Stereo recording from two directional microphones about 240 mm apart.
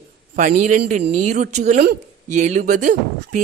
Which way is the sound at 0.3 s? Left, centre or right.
Right.